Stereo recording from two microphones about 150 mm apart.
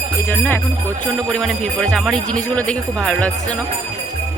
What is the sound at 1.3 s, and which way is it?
Speech, centre (ahead or behind).